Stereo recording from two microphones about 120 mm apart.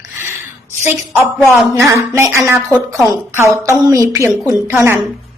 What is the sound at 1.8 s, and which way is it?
Speech, 20° right (ahead or behind).